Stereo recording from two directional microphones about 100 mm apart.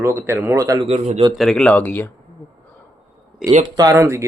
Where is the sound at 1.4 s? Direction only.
5° left (ahead or behind).